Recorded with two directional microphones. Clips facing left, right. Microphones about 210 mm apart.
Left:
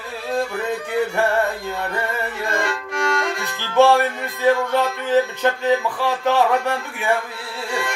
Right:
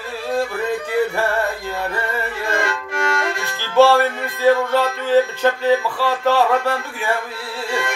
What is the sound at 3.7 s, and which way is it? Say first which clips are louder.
Music: right 2 dB; 15° left (ahead or behind).